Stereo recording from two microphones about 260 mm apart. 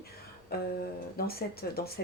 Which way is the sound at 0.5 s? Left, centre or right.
Left.